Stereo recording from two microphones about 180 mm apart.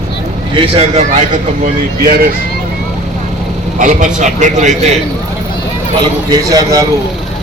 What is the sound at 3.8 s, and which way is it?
A man's voice, 45° right (ahead or behind).